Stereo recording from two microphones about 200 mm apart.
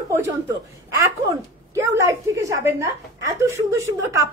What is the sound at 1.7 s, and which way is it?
A woman's voice, 15° right (ahead or behind).